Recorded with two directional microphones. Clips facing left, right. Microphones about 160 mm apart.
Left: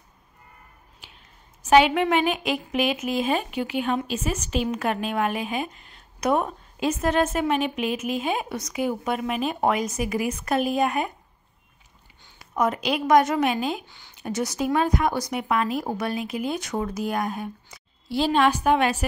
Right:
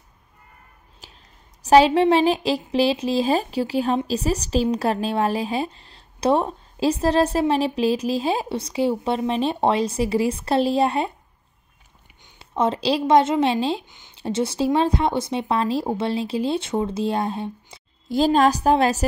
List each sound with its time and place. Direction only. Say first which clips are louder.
1.0 s a sound: right 3 dB; 40° right (ahead or behind)
1.6 s a woman's voice: right 3 dB; 35° right (ahead or behind)
12.2 s a woman's voice: right 2 dB; 25° right (ahead or behind)
18.0 s a woman's voice: right 3 dB; 45° right (ahead or behind)